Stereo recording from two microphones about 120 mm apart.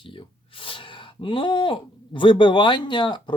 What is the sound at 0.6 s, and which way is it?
Speech, 45° left (ahead or behind).